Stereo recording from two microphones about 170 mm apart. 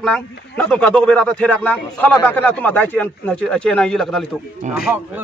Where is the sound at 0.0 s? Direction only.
5° left (ahead or behind).